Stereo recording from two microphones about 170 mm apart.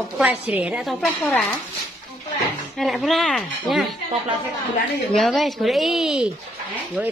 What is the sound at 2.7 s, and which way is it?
A woman's voice, centre (ahead or behind).